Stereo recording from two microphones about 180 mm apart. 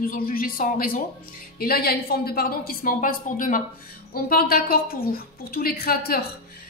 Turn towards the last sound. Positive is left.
turn(degrees=55)  # may be behind; listen again after turning